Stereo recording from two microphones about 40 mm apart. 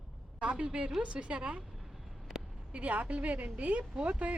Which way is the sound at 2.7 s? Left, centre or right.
Right.